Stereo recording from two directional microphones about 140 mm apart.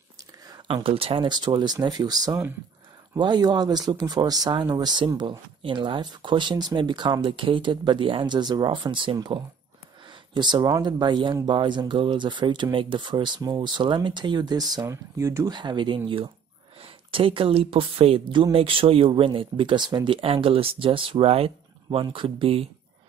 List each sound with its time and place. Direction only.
0.5 s a sound: 25° right (ahead or behind)
0.8 s speech: 40° right (ahead or behind)
17.1 s speech: 40° right (ahead or behind)